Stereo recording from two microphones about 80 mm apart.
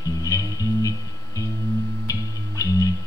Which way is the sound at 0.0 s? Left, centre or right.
Left.